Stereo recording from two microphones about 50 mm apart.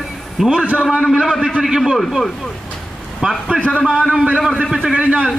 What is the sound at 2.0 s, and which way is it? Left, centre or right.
Speech, centre.